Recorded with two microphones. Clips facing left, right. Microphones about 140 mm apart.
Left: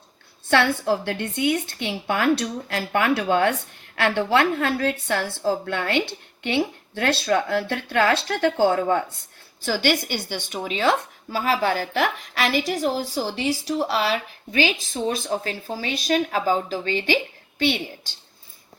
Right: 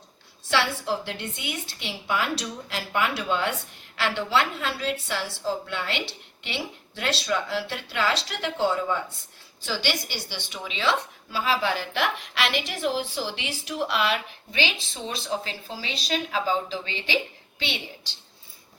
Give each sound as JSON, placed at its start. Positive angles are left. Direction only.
{"t": 0.5, "sound": "a woman's voice", "side_deg": 55}